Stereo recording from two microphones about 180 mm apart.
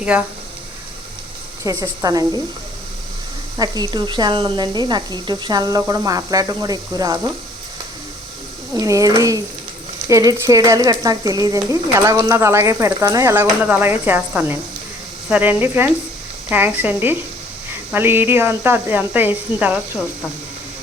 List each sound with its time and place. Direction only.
0.0 s speech: 5° right (ahead or behind)
1.6 s speech: 20° right (ahead or behind)
3.6 s speech: 25° right (ahead or behind)
8.7 s speech: 20° right (ahead or behind)
10.1 s stir: 15° right (ahead or behind)